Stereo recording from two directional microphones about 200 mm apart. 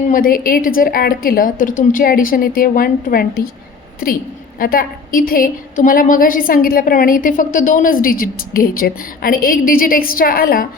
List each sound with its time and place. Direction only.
0.1 s a woman's voice: 45° left (ahead or behind)
4.6 s a woman's voice: 45° left (ahead or behind)